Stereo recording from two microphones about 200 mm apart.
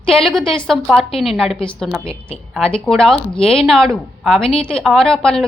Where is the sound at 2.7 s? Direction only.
5° left (ahead or behind).